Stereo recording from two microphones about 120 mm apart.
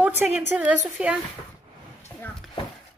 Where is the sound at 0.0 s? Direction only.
10° right (ahead or behind).